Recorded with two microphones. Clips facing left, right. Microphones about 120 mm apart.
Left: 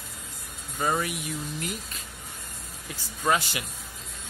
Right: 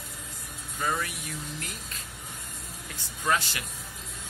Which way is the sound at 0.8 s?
25° left (ahead or behind).